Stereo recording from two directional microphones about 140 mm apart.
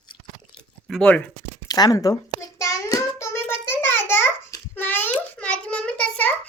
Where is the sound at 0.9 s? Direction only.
5° left (ahead or behind).